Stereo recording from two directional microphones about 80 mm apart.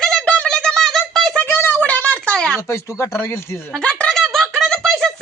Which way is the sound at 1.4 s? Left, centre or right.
Left.